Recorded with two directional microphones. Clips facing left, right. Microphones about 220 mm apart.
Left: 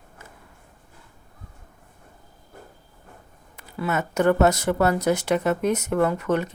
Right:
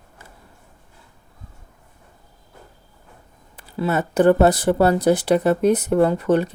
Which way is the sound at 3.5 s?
30° right (ahead or behind).